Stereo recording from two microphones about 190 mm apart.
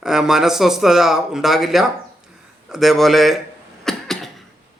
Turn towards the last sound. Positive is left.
turn(degrees=0)  # may be behind; listen again after turning